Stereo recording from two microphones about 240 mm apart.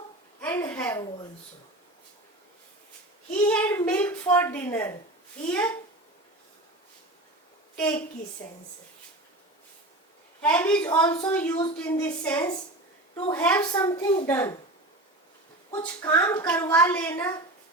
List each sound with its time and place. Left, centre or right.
0.4 s a sound: centre
3.3 s a child's voice: centre
7.8 s a child's voice: centre
10.4 s a woman's voice: centre
13.8 s a woman's voice: centre
15.7 s a woman's voice: centre
16.4 s a child's voice: centre